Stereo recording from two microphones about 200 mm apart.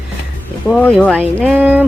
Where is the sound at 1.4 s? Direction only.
5° right (ahead or behind).